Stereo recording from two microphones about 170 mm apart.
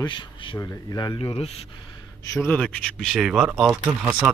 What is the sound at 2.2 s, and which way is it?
A man's voice, 15° left (ahead or behind).